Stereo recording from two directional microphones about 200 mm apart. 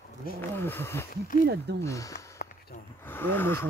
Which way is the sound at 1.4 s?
55° right (ahead or behind).